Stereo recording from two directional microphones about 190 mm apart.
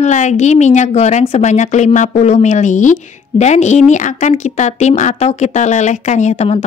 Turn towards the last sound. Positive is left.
turn(degrees=35)  # may be behind; listen again after turning